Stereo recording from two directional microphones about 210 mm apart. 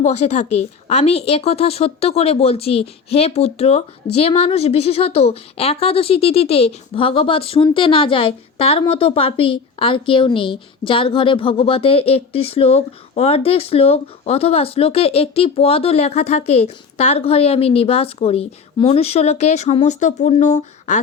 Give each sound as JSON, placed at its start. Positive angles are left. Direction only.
{"t": 0.0, "sound": "a woman's voice", "side_deg": 30}